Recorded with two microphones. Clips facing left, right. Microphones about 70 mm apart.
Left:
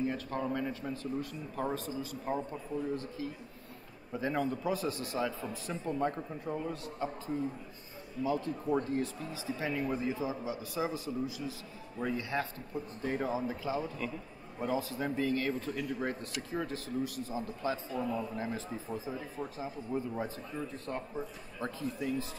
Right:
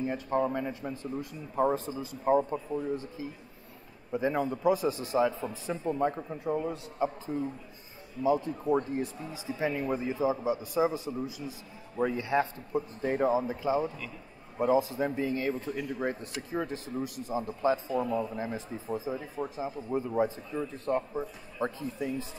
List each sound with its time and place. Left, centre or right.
0.0 s a man's voice: centre
7.3 s a man's voice: centre
8.2 s a man's voice: centre
12.0 s a man's voice: right